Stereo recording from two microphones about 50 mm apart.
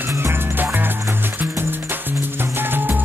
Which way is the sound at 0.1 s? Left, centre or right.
Right.